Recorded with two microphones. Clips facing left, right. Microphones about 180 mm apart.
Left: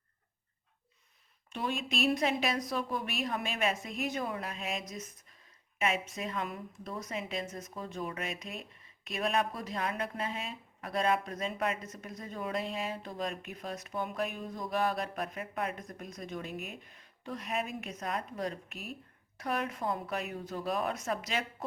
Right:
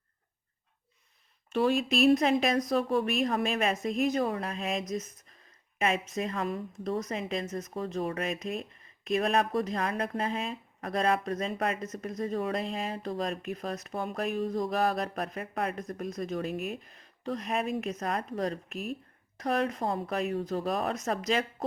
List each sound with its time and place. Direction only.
1.6 s speech: 40° right (ahead or behind)
6.1 s speech: 40° right (ahead or behind)
9.3 s speech: 45° right (ahead or behind)